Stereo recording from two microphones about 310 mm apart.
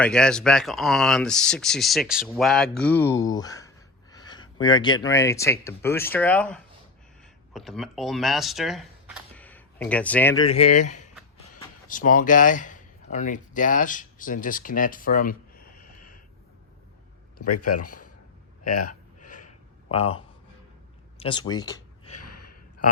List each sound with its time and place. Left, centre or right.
0.0 s speech: centre; by 15.6 s left
16.0 s a sound: left
17.5 s speech: left
17.8 s speech: left
18.7 s speech: left
19.5 s a sound: centre